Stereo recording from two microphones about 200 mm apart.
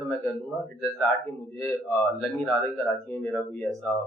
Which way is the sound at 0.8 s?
Centre (ahead or behind).